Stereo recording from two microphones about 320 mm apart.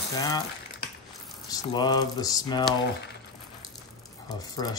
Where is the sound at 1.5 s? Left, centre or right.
Centre.